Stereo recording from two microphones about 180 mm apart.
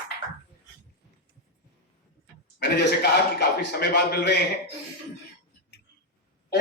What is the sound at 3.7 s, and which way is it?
Speech, 60° left (ahead or behind).